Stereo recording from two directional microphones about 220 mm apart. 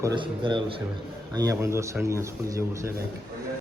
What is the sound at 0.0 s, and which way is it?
A man's voice, 20° right (ahead or behind).